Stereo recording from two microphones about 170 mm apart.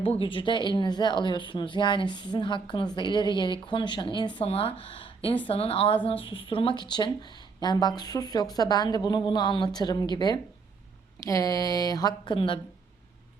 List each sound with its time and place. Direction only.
0.0 s a woman's voice: 35° left (ahead or behind)